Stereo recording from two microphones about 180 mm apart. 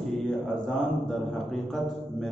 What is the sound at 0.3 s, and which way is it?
A man's voice, centre (ahead or behind).